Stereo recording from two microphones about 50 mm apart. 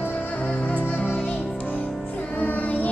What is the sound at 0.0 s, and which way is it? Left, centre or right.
Music, left.